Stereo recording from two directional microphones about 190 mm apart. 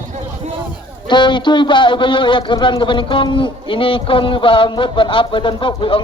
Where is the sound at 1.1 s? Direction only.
25° left (ahead or behind).